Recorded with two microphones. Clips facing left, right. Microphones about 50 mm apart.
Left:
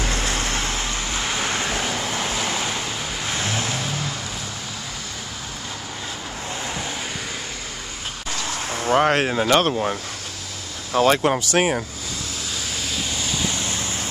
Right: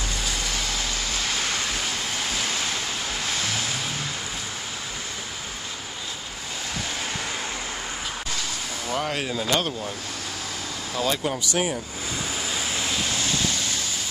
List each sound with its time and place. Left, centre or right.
0.0 s vehicle: left
1.2 s waves: centre
3.3 s vehicle: left
8.8 s speech: left
12.5 s vehicle: centre
13.5 s vehicle: left